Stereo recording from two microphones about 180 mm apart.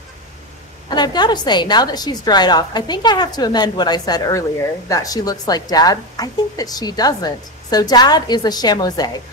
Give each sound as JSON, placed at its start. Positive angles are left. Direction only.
{"t": 0.8, "sound": "a woman's voice", "side_deg": 25}